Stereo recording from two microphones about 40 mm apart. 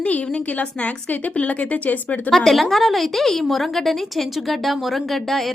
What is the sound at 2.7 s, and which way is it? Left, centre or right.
A woman's voice, centre.